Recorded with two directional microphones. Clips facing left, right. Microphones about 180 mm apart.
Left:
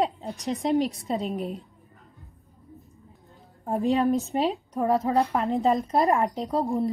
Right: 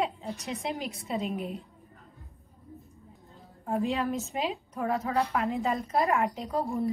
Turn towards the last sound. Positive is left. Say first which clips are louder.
# left 5 dB
turn(degrees=35)  # may be behind; listen again after turning